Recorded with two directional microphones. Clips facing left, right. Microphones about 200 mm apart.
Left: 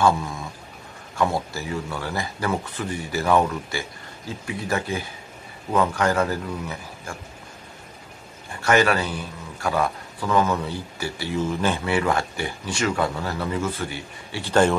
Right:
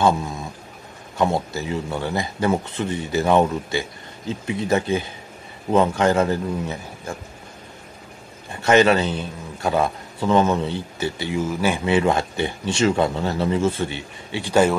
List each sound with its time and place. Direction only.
0.0 s a sound: 20° right (ahead or behind)
1.1 s a man's voice: 20° right (ahead or behind)
8.5 s a man's voice: 20° right (ahead or behind)
11.8 s a man's voice: 20° right (ahead or behind)